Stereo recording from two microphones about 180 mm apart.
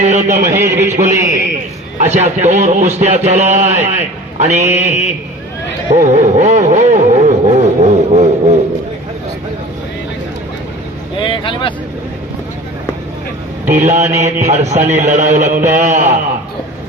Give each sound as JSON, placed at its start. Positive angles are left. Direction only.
{"t": 0.0, "sound": "a man's voice", "side_deg": -40}
{"t": 0.5, "sound": "a man's voice", "side_deg": -15}
{"t": 0.8, "sound": "a man's voice", "side_deg": -45}
{"t": 5.9, "sound": "a sound", "side_deg": -40}
{"t": 11.2, "sound": "a sound", "side_deg": 25}
{"t": 13.7, "sound": "a man's voice", "side_deg": -45}